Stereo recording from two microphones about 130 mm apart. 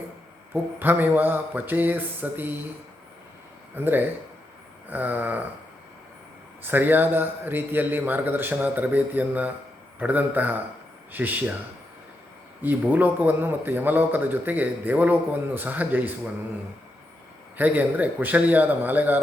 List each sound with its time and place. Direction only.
0.5 s a man's voice: 15° right (ahead or behind)
3.8 s a man's voice: 15° right (ahead or behind)
6.7 s a man's voice: 15° right (ahead or behind)
12.6 s a man's voice: 15° right (ahead or behind)
17.6 s a man's voice: 15° right (ahead or behind)